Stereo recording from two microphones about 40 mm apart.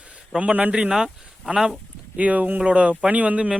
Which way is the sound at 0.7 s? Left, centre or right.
Right.